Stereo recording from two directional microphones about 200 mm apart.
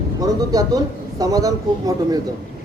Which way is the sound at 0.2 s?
20° right (ahead or behind).